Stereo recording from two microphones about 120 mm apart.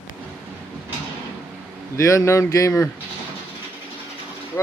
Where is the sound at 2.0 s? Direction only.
25° left (ahead or behind).